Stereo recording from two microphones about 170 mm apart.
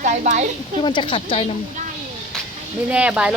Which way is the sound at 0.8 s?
30° left (ahead or behind).